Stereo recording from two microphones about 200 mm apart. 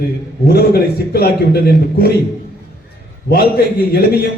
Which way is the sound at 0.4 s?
50° left (ahead or behind).